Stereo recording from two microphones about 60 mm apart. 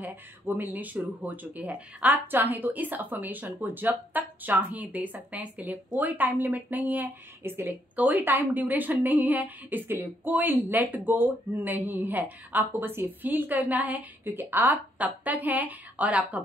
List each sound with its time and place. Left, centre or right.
0.0 s speech: right
7.9 s a woman's voice: right